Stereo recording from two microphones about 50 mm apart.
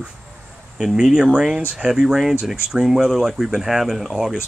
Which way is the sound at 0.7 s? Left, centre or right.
Centre.